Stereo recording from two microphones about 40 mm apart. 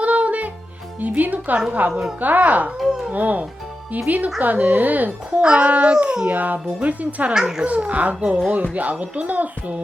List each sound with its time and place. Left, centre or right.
0.0 s music: right
1.0 s speech: right
1.9 s a woman's voice: centre
2.2 s speech: right
2.7 s a sound: centre
3.1 s a woman's voice: right
5.4 s dog: right
6.2 s a woman's voice: right
7.3 s a woman's voice: centre
7.6 s a woman's voice: right
8.2 s dog: right
8.7 s a woman's voice: right